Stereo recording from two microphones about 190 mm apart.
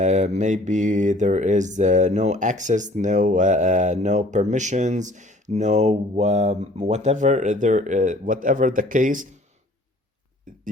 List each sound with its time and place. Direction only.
0.0 s mantra: 40° right (ahead or behind)